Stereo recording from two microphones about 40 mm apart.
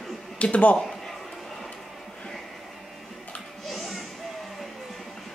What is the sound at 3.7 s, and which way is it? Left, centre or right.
Music, centre.